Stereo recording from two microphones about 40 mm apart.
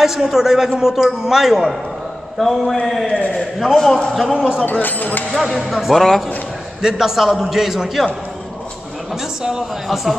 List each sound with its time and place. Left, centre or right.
0.0 s a man's voice: centre
4.3 s speech: centre
4.6 s speech: left
5.3 s a man's voice: centre
5.9 s a man's voice: centre
6.8 s a man's voice: centre
9.4 s a man's voice: centre